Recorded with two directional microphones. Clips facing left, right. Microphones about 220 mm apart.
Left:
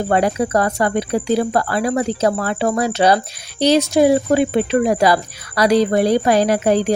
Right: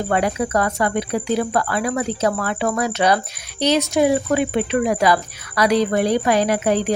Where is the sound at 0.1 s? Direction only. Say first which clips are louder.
Left 3 dB; 35° left (ahead or behind).